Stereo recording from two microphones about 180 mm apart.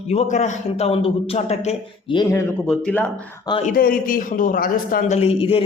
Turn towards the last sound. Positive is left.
turn(degrees=30)  # may be behind; listen again after turning